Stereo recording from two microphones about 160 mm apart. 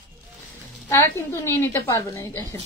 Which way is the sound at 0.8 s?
15° left (ahead or behind).